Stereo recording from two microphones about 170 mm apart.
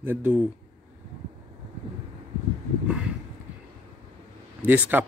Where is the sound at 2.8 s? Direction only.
5° right (ahead or behind).